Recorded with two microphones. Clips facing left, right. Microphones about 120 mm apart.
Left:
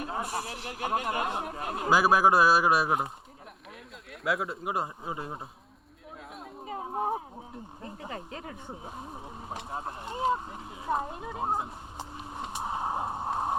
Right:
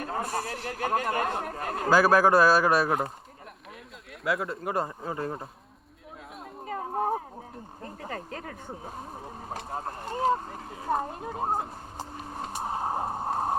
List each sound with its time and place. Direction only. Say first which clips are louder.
0.4 s a man's voice: right 4 dB; 15° left (ahead or behind)
0.8 s speech: right 2 dB; 40° right (ahead or behind)
2.0 s a man's voice: right 2 dB; 15° left (ahead or behind)
4.1 s speech: right 1 dB; centre (ahead or behind)
6.7 s a sound: right 2 dB; 50° right (ahead or behind)
8.0 s speech: right 3 dB; 45° right (ahead or behind)